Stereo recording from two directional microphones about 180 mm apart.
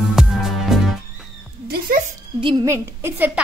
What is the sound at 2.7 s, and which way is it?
Speech, 15° right (ahead or behind).